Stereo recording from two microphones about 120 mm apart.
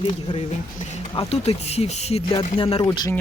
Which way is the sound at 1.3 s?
60° left (ahead or behind).